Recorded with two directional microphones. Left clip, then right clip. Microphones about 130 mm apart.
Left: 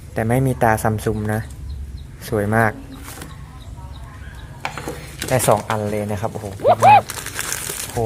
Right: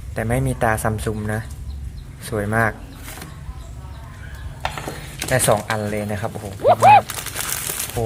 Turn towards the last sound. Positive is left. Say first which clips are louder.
# even
turn(degrees=-5)  # may be behind; listen again after turning